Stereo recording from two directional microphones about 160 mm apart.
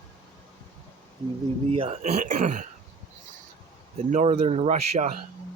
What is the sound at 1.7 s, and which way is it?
Speech, 40° right (ahead or behind).